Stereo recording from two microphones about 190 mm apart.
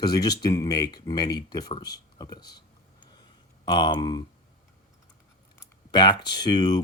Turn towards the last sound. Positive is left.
turn(degrees=20)  # may be behind; listen again after turning